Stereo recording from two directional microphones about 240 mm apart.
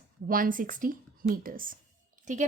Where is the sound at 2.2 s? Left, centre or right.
Right.